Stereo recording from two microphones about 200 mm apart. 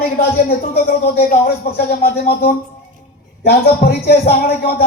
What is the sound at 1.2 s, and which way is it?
A man's voice, 50° left (ahead or behind).